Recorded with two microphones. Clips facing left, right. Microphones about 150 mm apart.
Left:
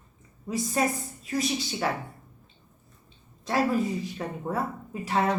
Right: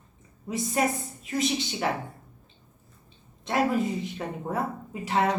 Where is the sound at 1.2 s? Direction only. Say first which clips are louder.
Right 1 dB; 25° right (ahead or behind).